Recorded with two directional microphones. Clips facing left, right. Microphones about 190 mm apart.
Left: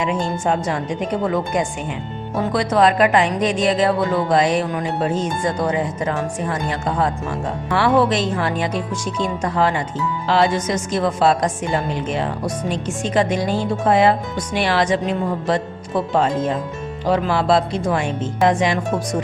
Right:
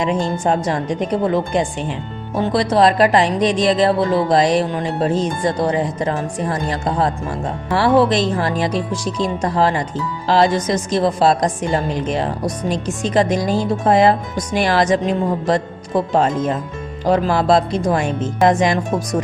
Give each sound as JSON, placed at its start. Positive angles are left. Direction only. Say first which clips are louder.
{"t": 0.0, "sound": "a woman's voice", "louder": "right 2 dB", "side_deg": -40}